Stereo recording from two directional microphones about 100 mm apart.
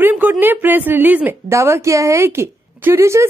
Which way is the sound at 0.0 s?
15° right (ahead or behind).